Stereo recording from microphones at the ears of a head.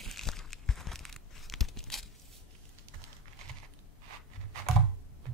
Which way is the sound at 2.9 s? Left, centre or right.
Right.